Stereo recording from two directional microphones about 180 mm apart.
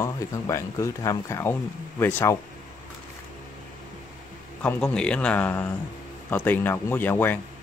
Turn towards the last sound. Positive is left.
turn(degrees=10)  # may be behind; listen again after turning